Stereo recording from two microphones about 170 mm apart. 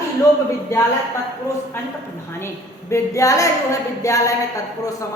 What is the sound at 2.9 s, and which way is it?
A woman's voice, 20° left (ahead or behind).